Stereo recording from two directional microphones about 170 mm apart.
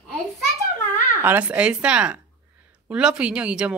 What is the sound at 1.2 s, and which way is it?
Speech, 10° right (ahead or behind).